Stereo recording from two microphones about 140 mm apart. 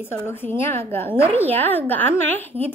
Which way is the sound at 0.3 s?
15° left (ahead or behind).